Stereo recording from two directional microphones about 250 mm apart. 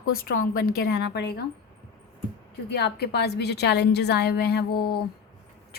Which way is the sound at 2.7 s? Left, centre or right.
Left.